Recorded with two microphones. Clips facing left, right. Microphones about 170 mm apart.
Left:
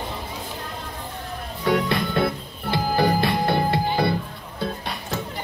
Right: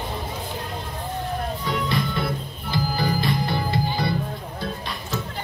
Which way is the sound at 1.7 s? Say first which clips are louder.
Left 6 dB; 60° left (ahead or behind).